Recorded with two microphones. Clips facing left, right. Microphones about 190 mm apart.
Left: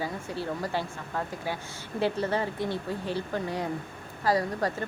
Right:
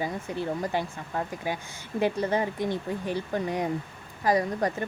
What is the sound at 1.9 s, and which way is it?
Speech, 15° right (ahead or behind).